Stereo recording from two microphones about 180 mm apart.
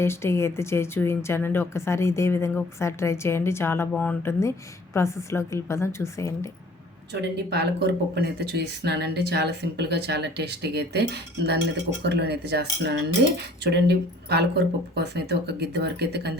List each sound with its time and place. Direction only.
0.0 s a woman's voice: 15° left (ahead or behind)
7.1 s speech: 70° right (ahead or behind)